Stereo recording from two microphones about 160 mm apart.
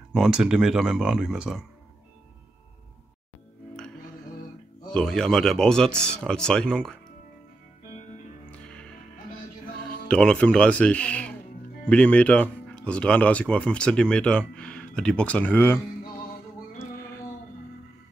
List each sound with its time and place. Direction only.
0.1 s speech: 5° right (ahead or behind)
4.8 s speech: 5° left (ahead or behind)
8.5 s music: 5° left (ahead or behind)
10.0 s speech: 5° left (ahead or behind)
16.7 s music: 15° left (ahead or behind)